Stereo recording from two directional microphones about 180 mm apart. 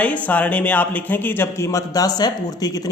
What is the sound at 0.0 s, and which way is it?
A man's voice, 5° left (ahead or behind).